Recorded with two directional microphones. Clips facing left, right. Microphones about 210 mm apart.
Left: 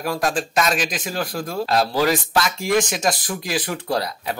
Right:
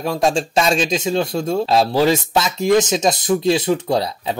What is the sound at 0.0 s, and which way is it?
Speech, 25° right (ahead or behind).